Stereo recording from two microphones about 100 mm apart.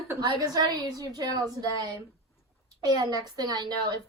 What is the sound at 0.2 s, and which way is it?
A woman's voice, 35° right (ahead or behind).